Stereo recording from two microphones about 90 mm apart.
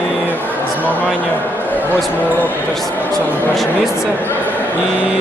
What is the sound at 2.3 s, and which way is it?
Speech, 20° left (ahead or behind).